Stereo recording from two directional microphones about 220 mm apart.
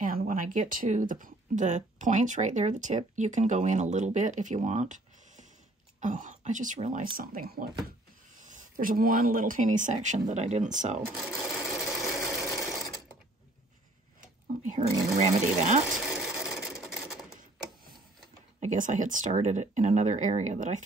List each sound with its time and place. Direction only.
0.0 s speech: 40° right (ahead or behind)
11.1 s sewing machine: centre (ahead or behind)
14.6 s speech: 35° right (ahead or behind)
15.9 s rub: centre (ahead or behind)
18.6 s speech: 35° right (ahead or behind)